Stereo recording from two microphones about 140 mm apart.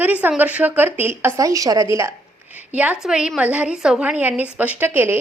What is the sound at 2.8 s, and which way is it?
A woman's voice, 10° right (ahead or behind).